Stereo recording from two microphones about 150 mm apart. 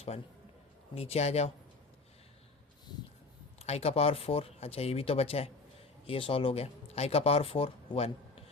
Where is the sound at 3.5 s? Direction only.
45° left (ahead or behind).